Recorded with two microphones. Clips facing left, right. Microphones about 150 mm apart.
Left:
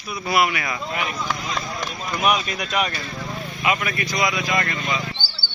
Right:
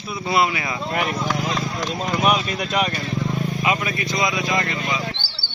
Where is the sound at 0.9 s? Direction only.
45° right (ahead or behind).